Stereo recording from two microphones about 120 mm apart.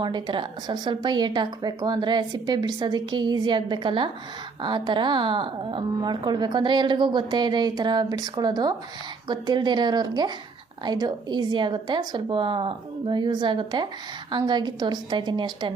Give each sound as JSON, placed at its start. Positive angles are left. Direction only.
{"t": 0.0, "sound": "a woman's voice", "side_deg": -40}